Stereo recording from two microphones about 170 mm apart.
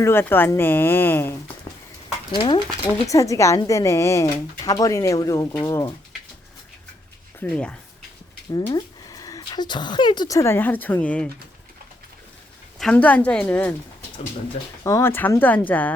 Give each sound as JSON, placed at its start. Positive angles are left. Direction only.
{"t": 0.0, "sound": "speech", "side_deg": 15}
{"t": 2.3, "sound": "speech", "side_deg": 25}
{"t": 7.3, "sound": "speech", "side_deg": 5}
{"t": 8.5, "sound": "speech", "side_deg": 25}
{"t": 12.8, "sound": "speech", "side_deg": 10}
{"t": 14.8, "sound": "speech", "side_deg": 15}